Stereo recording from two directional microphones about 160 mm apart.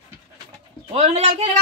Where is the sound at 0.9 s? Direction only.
40° right (ahead or behind).